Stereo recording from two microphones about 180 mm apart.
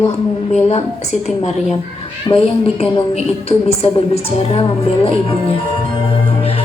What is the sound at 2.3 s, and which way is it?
Speech, 15° left (ahead or behind).